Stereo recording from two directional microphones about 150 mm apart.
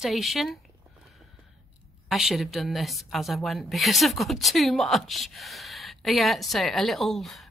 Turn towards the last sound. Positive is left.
turn(degrees=0)  # may be behind; listen again after turning